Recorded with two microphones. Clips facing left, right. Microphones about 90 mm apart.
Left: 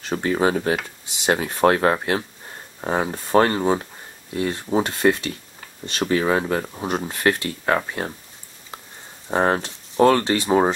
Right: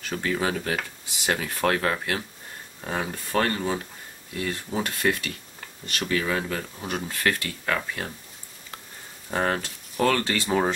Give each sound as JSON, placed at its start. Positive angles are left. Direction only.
{"t": 0.0, "sound": "speech", "side_deg": 30}
{"t": 9.3, "sound": "speech", "side_deg": 30}